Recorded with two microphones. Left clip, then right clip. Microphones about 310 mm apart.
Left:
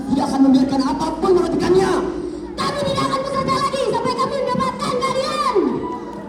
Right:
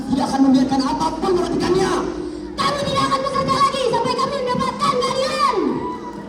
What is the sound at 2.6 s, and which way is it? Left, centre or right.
Music, centre.